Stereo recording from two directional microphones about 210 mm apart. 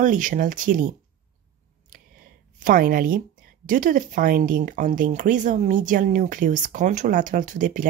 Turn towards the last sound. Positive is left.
turn(degrees=-40)  # may be behind; listen again after turning